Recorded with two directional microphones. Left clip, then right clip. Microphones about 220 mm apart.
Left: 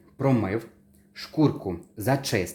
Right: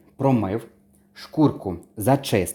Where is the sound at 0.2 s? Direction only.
20° right (ahead or behind).